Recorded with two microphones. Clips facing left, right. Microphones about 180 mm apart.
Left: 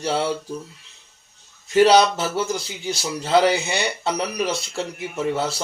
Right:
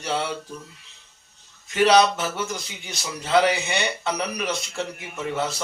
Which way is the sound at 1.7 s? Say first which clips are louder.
Left 3 dB; 35° left (ahead or behind).